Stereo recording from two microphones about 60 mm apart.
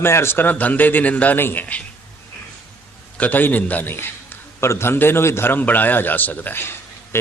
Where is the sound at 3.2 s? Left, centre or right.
Left.